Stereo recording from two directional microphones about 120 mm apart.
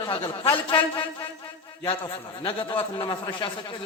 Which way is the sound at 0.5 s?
45° left (ahead or behind).